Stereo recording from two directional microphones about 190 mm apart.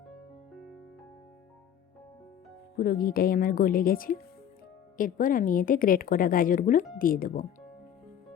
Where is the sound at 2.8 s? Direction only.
50° left (ahead or behind).